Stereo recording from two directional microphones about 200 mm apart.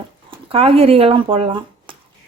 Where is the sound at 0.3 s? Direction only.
30° right (ahead or behind).